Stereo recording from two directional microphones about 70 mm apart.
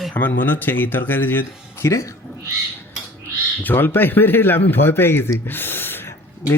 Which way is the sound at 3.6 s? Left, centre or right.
Left.